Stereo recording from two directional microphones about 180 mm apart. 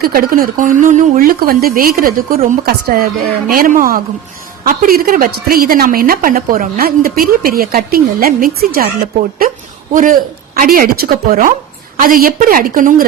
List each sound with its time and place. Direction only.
0.0 s a woman's voice: 55° right (ahead or behind)
9.9 s speech: 50° right (ahead or behind)